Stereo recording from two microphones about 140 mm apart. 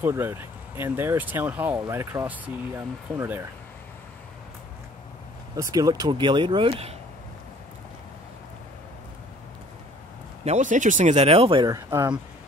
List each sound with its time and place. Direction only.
0.0 s speech: 15° right (ahead or behind)
5.6 s speech: 25° right (ahead or behind); by 7.0 s 45° right (ahead or behind)
10.4 s speech: 55° right (ahead or behind); by 11.7 s 40° right (ahead or behind)
11.7 s speech: 25° right (ahead or behind)